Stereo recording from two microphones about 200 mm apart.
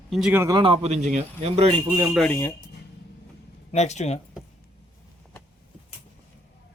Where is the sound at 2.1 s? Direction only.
5° left (ahead or behind).